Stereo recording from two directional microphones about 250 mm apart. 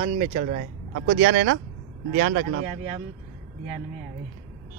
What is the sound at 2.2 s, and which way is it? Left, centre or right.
Speech, right.